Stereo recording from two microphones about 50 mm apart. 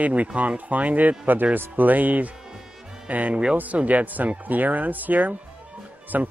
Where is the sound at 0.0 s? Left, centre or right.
Right.